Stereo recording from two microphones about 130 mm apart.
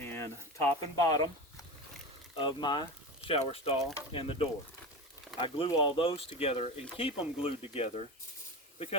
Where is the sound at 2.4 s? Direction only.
40° left (ahead or behind).